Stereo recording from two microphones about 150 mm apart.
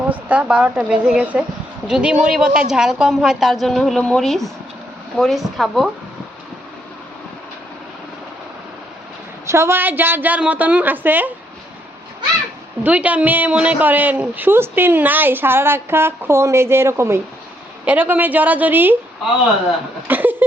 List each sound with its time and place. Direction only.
0.1 s a woman's voice: 10° right (ahead or behind)
9.5 s a woman's voice: 15° right (ahead or behind)
12.8 s a woman's voice: 10° right (ahead or behind)
20.1 s a woman's voice: 10° right (ahead or behind)